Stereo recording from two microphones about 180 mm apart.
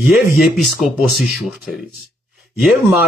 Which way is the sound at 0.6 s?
Centre (ahead or behind).